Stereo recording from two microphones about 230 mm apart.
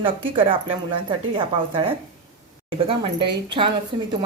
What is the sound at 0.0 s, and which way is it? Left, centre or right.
Speech, right.